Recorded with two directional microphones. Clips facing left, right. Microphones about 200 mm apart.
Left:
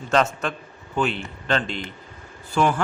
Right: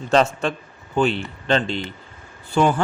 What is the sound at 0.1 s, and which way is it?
Speech, 30° right (ahead or behind).